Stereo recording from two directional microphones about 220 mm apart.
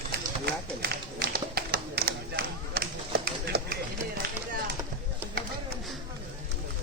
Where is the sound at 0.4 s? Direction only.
45° right (ahead or behind).